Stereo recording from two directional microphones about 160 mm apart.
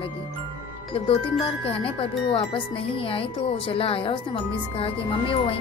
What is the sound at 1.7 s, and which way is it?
Speech, 35° left (ahead or behind).